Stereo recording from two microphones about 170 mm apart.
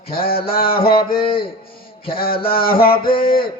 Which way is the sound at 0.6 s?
30° left (ahead or behind).